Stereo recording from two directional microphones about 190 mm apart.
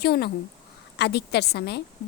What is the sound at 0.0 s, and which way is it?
A woman's voice, 55° left (ahead or behind).